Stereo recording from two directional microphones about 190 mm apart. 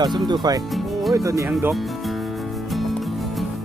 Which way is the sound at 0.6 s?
Centre (ahead or behind).